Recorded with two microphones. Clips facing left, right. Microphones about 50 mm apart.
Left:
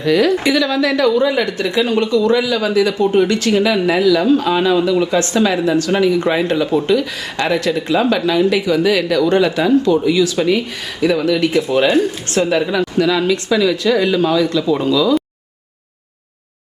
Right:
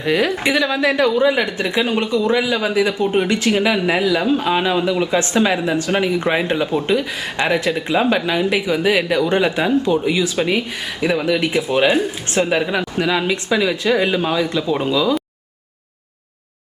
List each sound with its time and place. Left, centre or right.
0.0 s speech: right